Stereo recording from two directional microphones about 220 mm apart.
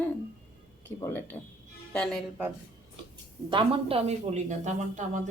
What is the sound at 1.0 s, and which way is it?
A woman's voice, 10° left (ahead or behind).